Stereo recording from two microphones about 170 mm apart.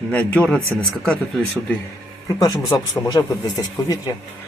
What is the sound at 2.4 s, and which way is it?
Speech, 20° left (ahead or behind).